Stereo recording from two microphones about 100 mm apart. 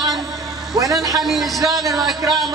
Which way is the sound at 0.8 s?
35° right (ahead or behind).